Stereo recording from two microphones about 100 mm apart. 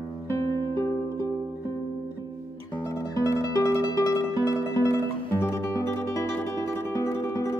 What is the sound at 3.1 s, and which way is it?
Music, 30° left (ahead or behind).